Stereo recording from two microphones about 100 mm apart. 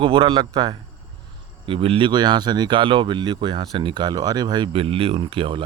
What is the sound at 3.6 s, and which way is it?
Speech, 55° right (ahead or behind).